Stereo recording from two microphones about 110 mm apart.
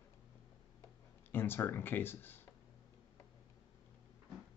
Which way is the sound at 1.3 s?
20° left (ahead or behind).